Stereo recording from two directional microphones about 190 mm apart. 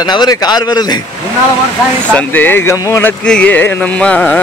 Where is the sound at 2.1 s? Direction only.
10° left (ahead or behind).